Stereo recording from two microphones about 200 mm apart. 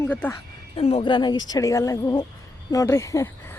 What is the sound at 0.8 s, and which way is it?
Speech, 30° left (ahead or behind).